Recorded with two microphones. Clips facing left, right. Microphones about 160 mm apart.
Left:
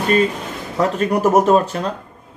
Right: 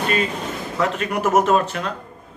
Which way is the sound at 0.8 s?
35° left (ahead or behind).